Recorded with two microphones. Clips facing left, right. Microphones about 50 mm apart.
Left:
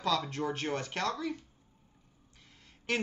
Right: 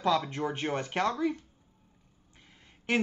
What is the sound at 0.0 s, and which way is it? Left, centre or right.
Speech, right.